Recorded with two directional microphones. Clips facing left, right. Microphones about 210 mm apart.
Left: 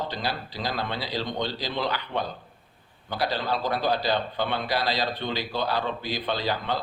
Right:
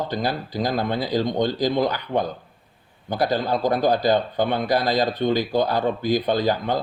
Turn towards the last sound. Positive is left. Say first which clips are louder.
# right 7 dB
turn(degrees=-45)  # may be behind; listen again after turning